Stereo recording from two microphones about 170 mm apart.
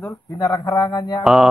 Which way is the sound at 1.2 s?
Centre (ahead or behind).